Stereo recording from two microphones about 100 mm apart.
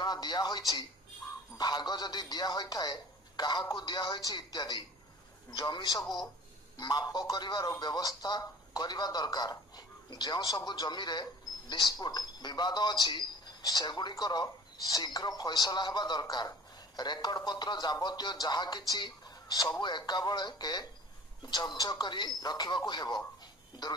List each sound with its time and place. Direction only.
0.0 s speech: 45° left (ahead or behind)